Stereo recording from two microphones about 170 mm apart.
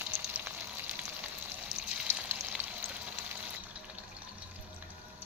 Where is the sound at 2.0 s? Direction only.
10° right (ahead or behind).